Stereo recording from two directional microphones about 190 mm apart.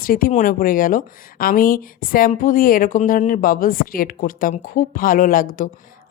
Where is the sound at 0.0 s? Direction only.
50° left (ahead or behind).